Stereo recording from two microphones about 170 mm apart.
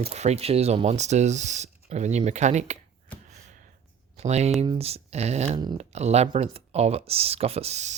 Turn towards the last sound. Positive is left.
turn(degrees=-40)  # may be behind; listen again after turning